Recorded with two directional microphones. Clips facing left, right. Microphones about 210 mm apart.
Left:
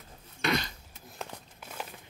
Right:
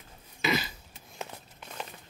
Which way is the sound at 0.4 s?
5° right (ahead or behind).